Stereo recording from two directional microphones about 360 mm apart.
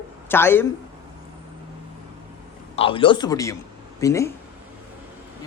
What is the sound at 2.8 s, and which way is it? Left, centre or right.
A man's voice, centre.